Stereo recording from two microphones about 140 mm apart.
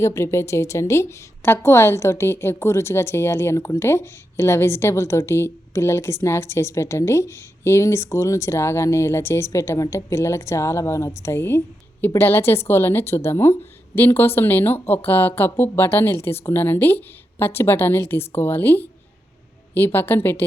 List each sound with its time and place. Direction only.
0.0 s a woman's voice: 20° left (ahead or behind)